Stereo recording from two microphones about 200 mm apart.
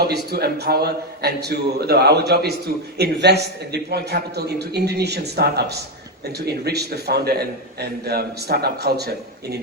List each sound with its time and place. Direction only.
0.0 s a man's voice: 50° right (ahead or behind)